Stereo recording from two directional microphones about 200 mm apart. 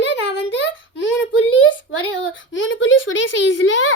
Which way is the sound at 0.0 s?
60° left (ahead or behind).